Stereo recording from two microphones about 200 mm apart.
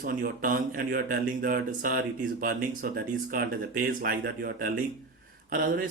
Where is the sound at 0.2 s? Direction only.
45° right (ahead or behind).